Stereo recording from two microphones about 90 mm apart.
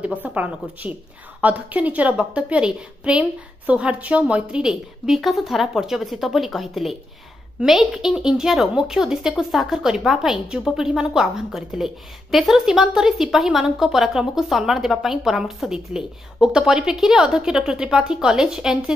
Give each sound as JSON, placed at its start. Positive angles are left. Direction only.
{"t": 0.0, "sound": "a woman's voice", "side_deg": -15}